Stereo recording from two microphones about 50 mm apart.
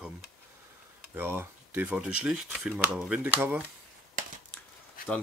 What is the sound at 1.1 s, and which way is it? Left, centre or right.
Speech, right.